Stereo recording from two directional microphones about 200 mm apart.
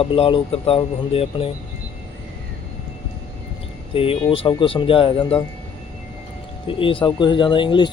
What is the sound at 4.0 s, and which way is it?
Speech, 25° left (ahead or behind).